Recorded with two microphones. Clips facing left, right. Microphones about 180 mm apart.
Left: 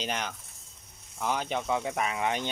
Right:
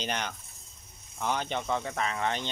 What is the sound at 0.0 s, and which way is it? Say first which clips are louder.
Speech: even; centre (ahead or behind).